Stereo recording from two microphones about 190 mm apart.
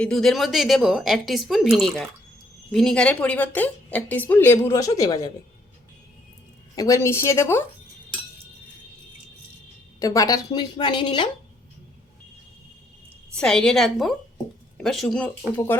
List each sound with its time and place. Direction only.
0.0 s a woman's voice: 5° left (ahead or behind); by 5.3 s 20° left (ahead or behind)
6.7 s speech: 15° left (ahead or behind)
10.0 s speech: 15° left (ahead or behind)
13.3 s a woman's voice: 5° left (ahead or behind)